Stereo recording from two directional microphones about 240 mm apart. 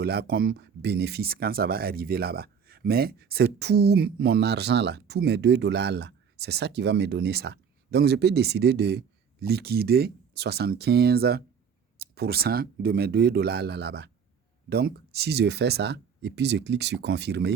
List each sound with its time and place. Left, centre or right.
0.0 s speech: right